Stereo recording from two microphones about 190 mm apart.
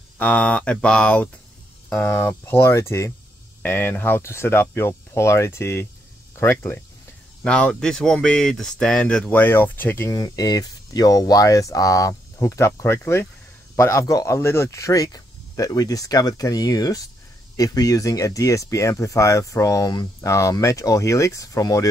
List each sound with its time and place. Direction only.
0.2 s speech: 10° left (ahead or behind)